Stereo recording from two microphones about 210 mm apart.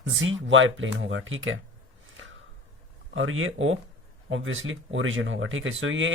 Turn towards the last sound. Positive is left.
turn(degrees=-65)  # may be behind; listen again after turning